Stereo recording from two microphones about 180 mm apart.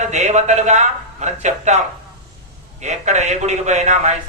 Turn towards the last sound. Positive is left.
turn(degrees=-40)  # may be behind; listen again after turning